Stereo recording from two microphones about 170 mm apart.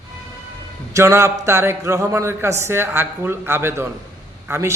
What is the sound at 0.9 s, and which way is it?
A man's voice, 15° right (ahead or behind).